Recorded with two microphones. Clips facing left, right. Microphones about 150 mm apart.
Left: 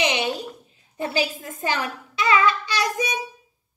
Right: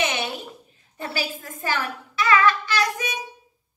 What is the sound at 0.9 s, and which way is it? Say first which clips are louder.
A child's voice: left 5 dB; 20° left (ahead or behind).